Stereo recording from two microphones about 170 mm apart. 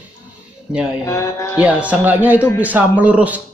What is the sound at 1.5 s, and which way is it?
Speech, 5° right (ahead or behind).